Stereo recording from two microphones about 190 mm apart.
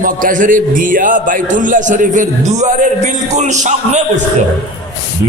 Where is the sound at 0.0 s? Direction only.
45° right (ahead or behind).